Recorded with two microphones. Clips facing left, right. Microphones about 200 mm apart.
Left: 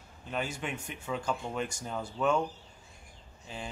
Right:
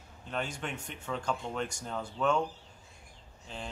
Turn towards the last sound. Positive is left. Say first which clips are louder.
# left 1 dB
turn(degrees=5)  # may be behind; listen again after turning